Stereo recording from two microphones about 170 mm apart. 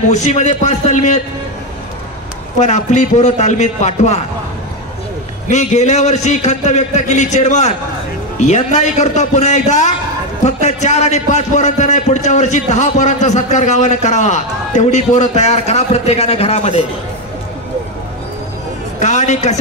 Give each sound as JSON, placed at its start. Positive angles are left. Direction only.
{"t": 0.1, "sound": "a man's voice", "side_deg": 45}
{"t": 2.6, "sound": "a man's voice", "side_deg": 45}
{"t": 5.5, "sound": "a man's voice", "side_deg": 40}
{"t": 18.9, "sound": "a man's voice", "side_deg": 45}